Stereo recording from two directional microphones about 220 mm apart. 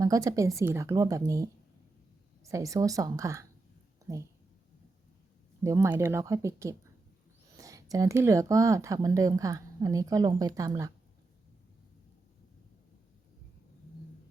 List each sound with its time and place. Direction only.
0.0 s speech: 15° right (ahead or behind)
2.4 s speech: 15° right (ahead or behind)
5.6 s speech: 15° right (ahead or behind)